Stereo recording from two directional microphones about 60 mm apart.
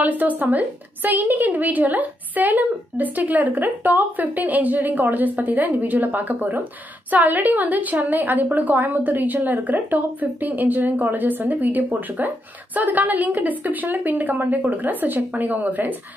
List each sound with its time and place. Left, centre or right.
0.0 s a woman's voice: right